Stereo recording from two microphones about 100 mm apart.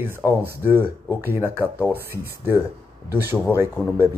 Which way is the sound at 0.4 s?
20° right (ahead or behind).